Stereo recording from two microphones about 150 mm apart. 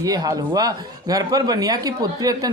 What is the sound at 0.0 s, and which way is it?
Speech, 25° right (ahead or behind).